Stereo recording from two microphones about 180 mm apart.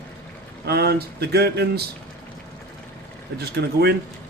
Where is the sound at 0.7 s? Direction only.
60° right (ahead or behind).